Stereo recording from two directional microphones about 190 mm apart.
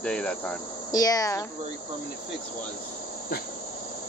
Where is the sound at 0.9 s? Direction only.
20° left (ahead or behind).